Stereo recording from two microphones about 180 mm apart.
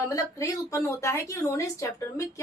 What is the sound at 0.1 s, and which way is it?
A woman's voice, 20° left (ahead or behind).